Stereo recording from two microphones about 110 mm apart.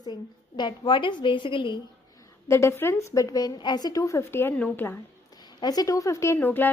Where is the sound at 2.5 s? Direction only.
25° left (ahead or behind).